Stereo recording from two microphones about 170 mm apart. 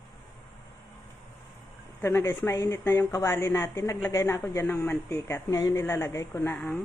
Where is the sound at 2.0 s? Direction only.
15° left (ahead or behind).